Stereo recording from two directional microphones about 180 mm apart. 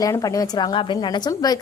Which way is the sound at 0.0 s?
20° left (ahead or behind).